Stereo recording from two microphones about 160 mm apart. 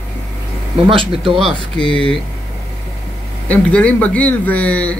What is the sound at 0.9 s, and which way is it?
Speech, 35° right (ahead or behind).